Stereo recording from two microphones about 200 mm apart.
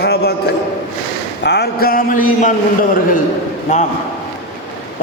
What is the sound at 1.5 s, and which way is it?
Speech, 55° left (ahead or behind).